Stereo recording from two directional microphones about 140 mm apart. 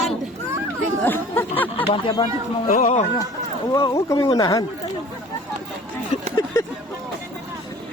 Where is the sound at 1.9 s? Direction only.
35° left (ahead or behind).